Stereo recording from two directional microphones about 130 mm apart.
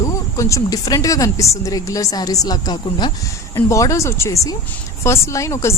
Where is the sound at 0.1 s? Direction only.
25° left (ahead or behind).